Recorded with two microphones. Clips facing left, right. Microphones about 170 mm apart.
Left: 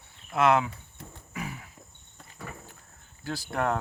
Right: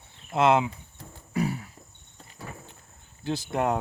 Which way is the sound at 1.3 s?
40° right (ahead or behind).